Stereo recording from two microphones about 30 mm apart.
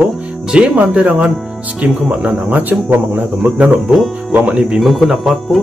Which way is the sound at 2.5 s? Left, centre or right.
Right.